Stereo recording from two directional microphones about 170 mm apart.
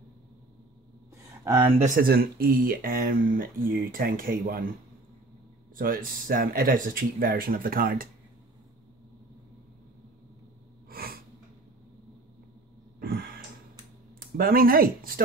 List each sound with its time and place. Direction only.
2.0 s speech: 60° right (ahead or behind)
5.8 s speech: 55° right (ahead or behind)
10.9 s snort: 60° right (ahead or behind)
13.0 s a sound: 60° right (ahead or behind)
14.2 s speech: 60° right (ahead or behind)